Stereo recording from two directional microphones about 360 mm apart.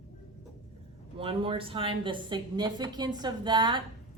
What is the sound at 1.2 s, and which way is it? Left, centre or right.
A woman's voice, centre.